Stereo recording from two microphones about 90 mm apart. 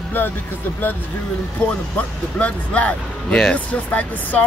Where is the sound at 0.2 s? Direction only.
20° left (ahead or behind).